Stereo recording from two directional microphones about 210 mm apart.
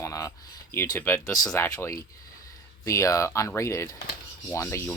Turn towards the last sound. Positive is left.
turn(degrees=10)  # may be behind; listen again after turning